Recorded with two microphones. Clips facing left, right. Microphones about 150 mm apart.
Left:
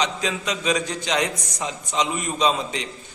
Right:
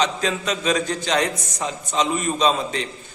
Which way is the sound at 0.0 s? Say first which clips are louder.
Right 3 dB; 15° left (ahead or behind).